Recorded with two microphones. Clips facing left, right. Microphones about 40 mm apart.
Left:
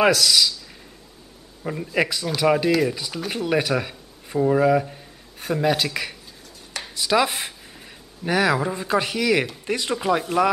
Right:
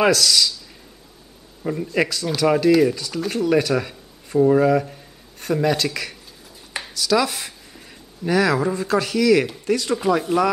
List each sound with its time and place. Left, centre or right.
0.0 s speech: centre
1.6 s speech: centre
3.0 s speech: centre
6.9 s speech: left
7.7 s speech: centre
9.9 s speech: centre